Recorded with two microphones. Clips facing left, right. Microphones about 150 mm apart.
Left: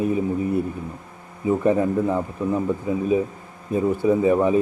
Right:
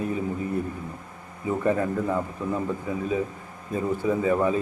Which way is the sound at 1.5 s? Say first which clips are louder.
Left 5 dB; 15° left (ahead or behind).